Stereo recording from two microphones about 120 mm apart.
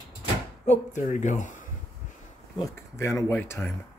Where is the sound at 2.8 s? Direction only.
20° left (ahead or behind).